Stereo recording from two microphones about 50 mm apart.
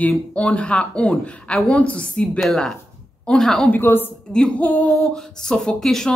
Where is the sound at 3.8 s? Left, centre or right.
Left.